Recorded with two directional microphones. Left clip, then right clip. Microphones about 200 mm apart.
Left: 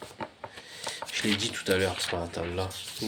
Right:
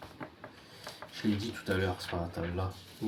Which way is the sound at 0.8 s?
30° left (ahead or behind).